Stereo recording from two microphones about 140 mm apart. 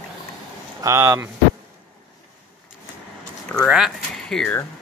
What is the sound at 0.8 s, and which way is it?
Speech, 20° right (ahead or behind).